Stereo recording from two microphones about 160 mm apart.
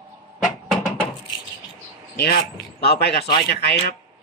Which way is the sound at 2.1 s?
80° left.